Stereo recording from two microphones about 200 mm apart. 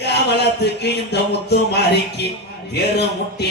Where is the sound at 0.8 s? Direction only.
55° left (ahead or behind).